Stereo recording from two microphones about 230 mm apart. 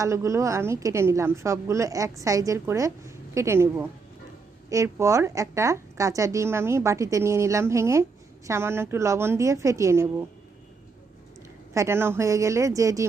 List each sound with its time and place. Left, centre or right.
0.0 s a woman's voice: centre
11.7 s a woman's voice: centre